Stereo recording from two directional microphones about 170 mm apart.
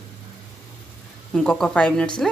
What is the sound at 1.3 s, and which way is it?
Speech, 5° left (ahead or behind).